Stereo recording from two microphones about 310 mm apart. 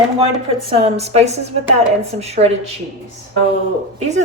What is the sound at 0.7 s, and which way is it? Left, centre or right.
A woman's voice, centre.